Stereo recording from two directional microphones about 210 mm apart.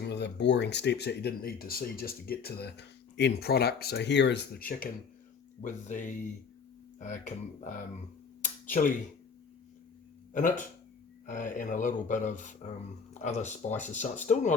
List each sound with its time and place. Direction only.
0.0 s speech: 55° left (ahead or behind)
10.3 s speech: 40° left (ahead or behind)